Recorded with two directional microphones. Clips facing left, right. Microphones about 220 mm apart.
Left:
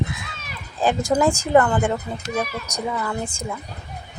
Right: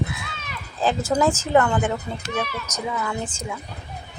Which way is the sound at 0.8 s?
15° left (ahead or behind).